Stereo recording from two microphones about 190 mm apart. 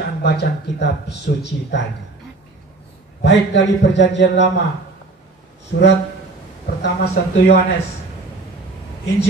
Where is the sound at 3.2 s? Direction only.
70° left (ahead or behind).